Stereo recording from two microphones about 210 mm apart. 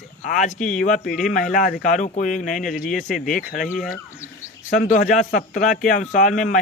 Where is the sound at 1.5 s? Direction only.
45° left (ahead or behind).